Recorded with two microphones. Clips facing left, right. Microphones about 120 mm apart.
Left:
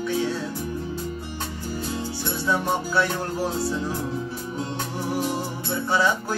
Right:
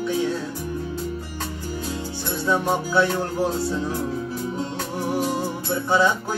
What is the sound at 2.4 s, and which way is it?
Music, 20° right (ahead or behind).